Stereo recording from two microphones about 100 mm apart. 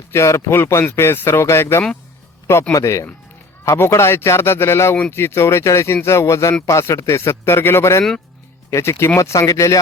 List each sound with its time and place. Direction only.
0.1 s speech: 25° left (ahead or behind)